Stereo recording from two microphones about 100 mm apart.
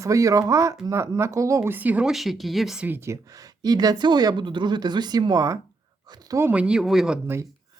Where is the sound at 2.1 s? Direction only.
Centre (ahead or behind).